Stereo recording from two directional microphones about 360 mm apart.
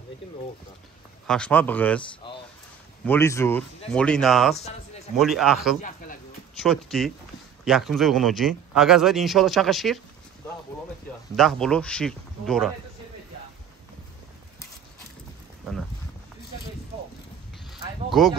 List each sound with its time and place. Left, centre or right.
1.2 s speech: centre
3.1 s speech: centre
5.8 s speech: left
6.5 s speech: centre
11.3 s speech: centre
17.6 s a sound: centre